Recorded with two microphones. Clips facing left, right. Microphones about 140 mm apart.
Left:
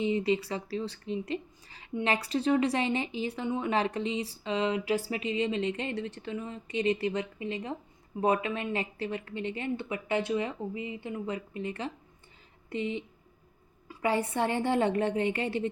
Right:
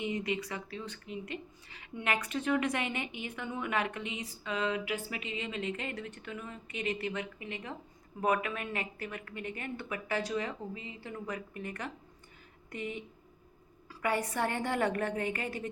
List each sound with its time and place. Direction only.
0.0 s a woman's voice: 30° left (ahead or behind)